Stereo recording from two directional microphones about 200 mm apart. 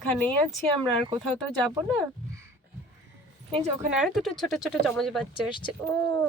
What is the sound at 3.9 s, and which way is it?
Speech, centre (ahead or behind).